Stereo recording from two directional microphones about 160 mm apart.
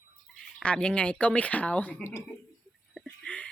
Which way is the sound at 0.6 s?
5° left (ahead or behind).